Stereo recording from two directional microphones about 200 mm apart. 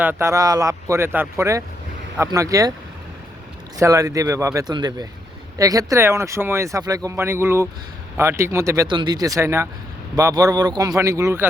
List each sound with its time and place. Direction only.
0.0 s speech: 10° right (ahead or behind)
3.8 s speech: 15° right (ahead or behind)